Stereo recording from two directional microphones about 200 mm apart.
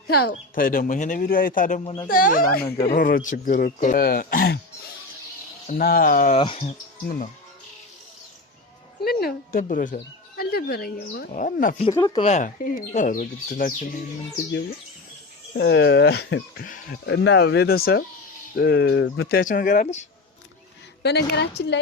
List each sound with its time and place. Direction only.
0.1 s speech: 50° left (ahead or behind)
1.8 s speech: 30° left (ahead or behind)
2.0 s speech: 45° left (ahead or behind)
2.6 s speech: 15° left (ahead or behind)
2.9 s speech: 45° left (ahead or behind)
5.6 s speech: 45° left (ahead or behind)
6.4 s speech: 30° left (ahead or behind)
9.0 s speech: 50° left (ahead or behind)
11.9 s speech: 20° left (ahead or behind); by 13.7 s 45° left (ahead or behind)
15.5 s speech: 60° left (ahead or behind)
17.1 s speech: 60° left (ahead or behind)
19.3 s speech: 45° left (ahead or behind)
21.0 s speech: 55° left (ahead or behind)